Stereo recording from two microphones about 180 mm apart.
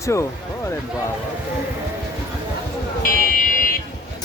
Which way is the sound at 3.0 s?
50° left (ahead or behind).